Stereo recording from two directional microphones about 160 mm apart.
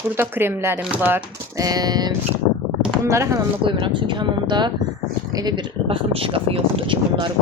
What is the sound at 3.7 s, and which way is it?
Speech, 30° right (ahead or behind).